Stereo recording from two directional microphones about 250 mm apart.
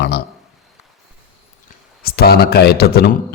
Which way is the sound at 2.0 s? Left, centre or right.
Left.